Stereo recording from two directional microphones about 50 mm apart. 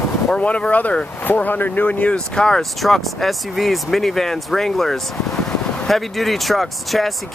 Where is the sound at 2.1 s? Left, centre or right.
Centre.